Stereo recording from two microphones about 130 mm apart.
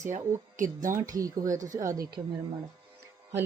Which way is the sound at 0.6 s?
20° right (ahead or behind).